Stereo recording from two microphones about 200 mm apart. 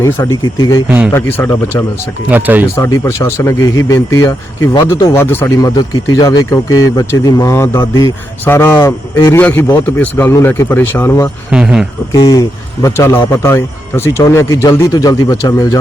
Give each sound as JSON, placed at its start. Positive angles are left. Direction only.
{"t": 0.4, "sound": "speech", "side_deg": 20}
{"t": 0.9, "sound": "speech", "side_deg": -10}
{"t": 1.1, "sound": "speech", "side_deg": 10}
{"t": 2.3, "sound": "speech", "side_deg": -10}
{"t": 2.7, "sound": "speech", "side_deg": 15}
{"t": 11.5, "sound": "speech", "side_deg": -5}
{"t": 12.1, "sound": "speech", "side_deg": 20}